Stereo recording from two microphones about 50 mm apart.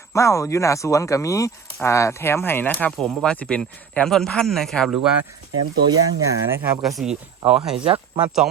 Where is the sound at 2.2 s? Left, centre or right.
Left.